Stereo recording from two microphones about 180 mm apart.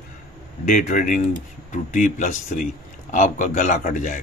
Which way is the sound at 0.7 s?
45° left (ahead or behind).